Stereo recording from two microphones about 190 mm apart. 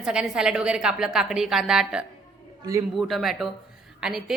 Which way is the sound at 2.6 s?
15° right (ahead or behind).